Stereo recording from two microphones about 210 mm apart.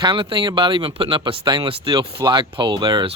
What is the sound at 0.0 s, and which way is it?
Speech, 20° right (ahead or behind).